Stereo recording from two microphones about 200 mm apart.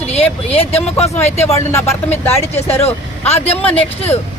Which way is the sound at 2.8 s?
30° left (ahead or behind).